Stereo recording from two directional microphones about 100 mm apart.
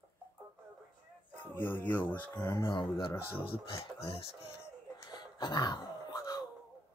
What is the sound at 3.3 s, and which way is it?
Speech, 65° left (ahead or behind).